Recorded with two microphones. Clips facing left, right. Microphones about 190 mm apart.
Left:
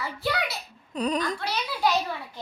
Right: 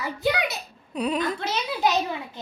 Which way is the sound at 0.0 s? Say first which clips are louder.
Right 4 dB; 20° right (ahead or behind).